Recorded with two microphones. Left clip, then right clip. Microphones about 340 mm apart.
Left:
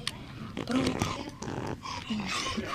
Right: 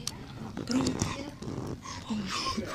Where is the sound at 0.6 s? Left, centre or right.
Centre.